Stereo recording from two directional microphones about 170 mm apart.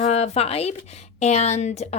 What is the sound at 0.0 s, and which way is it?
A woman's voice, 40° left (ahead or behind).